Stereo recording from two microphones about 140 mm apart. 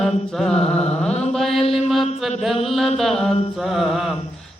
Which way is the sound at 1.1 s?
50° left (ahead or behind).